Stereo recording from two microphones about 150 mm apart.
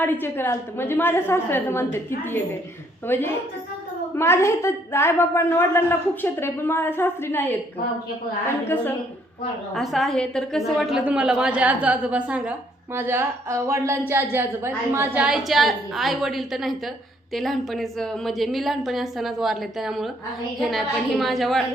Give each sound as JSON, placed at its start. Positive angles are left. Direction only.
{"t": 0.0, "sound": "a woman's voice", "side_deg": 15}
{"t": 9.7, "sound": "a woman's voice", "side_deg": 0}